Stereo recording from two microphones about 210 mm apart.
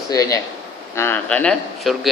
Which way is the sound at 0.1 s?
15° left (ahead or behind).